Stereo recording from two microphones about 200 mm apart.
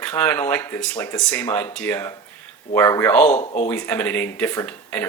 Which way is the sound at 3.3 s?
35° left (ahead or behind).